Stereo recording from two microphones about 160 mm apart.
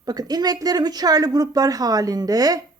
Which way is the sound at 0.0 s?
25° right (ahead or behind).